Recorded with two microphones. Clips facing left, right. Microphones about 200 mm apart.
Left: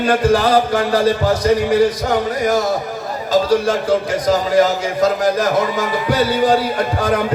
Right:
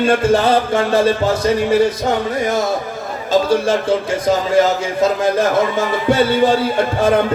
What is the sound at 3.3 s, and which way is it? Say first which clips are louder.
A man's voice: even; 25° right (ahead or behind).